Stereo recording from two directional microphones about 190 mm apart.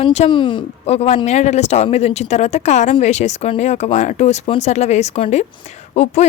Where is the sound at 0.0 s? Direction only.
30° left (ahead or behind).